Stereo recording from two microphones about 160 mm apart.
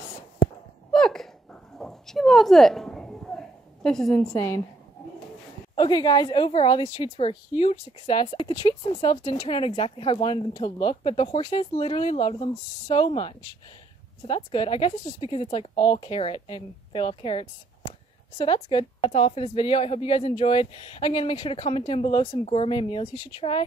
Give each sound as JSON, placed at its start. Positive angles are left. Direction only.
{"t": 0.9, "sound": "a sound", "side_deg": 5}
{"t": 4.3, "sound": "a woman's voice", "side_deg": 20}
{"t": 5.8, "sound": "a woman's voice", "side_deg": 25}